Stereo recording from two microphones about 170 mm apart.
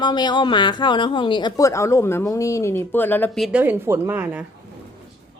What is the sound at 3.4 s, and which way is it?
Speech, 10° right (ahead or behind).